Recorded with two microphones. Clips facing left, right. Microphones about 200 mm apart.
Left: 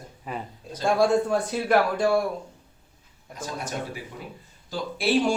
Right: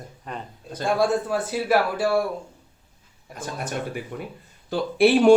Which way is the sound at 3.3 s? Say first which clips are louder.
Right 2 dB; 55° right (ahead or behind).